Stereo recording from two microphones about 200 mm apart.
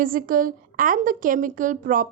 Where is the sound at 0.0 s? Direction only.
45° right (ahead or behind).